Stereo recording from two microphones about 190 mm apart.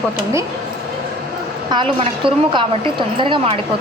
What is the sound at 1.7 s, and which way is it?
A woman's voice, 25° right (ahead or behind).